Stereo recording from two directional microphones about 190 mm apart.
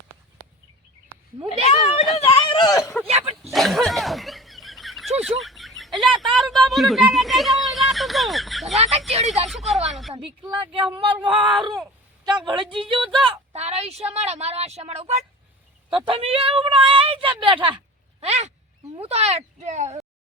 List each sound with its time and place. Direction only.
1.6 s a sound: 35° left (ahead or behind)
3.4 s snicker: centre (ahead or behind)
5.2 s a sound: centre (ahead or behind)
8.7 s speech: 35° right (ahead or behind)
9.5 s speech: centre (ahead or behind)
10.5 s a woman's voice: 25° right (ahead or behind)